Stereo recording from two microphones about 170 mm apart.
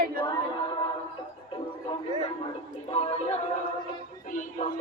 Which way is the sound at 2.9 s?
40° left (ahead or behind).